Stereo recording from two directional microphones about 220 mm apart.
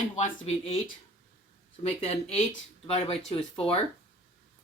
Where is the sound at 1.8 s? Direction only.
30° left (ahead or behind).